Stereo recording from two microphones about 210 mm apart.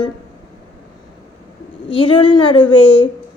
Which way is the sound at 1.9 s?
25° left (ahead or behind).